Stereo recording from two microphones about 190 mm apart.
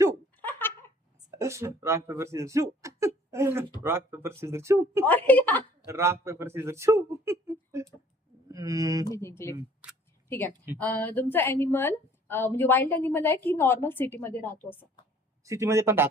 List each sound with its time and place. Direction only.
0.4 s giggle: 10° left (ahead or behind)
1.4 s speech: 15° right (ahead or behind)
5.0 s a woman's voice: 10° left (ahead or behind)
5.9 s speech: 15° right (ahead or behind)
9.0 s a woman's voice: 15° left (ahead or behind)
15.4 s speech: 15° right (ahead or behind)